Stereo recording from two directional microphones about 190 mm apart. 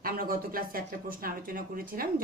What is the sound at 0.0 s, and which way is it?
Speech, 50° right (ahead or behind).